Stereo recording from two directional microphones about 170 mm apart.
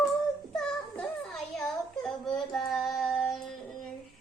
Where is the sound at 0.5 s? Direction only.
Centre (ahead or behind).